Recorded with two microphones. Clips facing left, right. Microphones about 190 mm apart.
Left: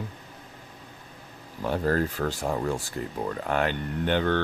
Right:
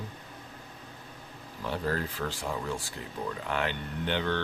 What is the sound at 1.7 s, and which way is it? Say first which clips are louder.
Speech: left 6 dB; 45° left (ahead or behind).